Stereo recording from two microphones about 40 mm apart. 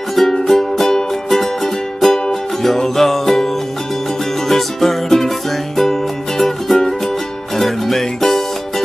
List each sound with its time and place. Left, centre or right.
0.1 s music: centre